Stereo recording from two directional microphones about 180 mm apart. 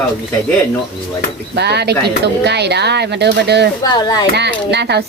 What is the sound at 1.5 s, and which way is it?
A woman's voice, 65° right (ahead or behind).